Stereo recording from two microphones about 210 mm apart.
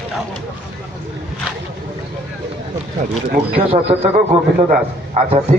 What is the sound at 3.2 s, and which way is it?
Speech, 55° right (ahead or behind).